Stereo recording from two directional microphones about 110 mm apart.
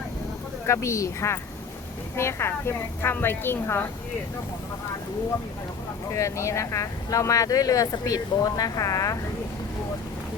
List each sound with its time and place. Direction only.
0.7 s a woman's voice: 25° left (ahead or behind)
6.1 s speech: 30° left (ahead or behind)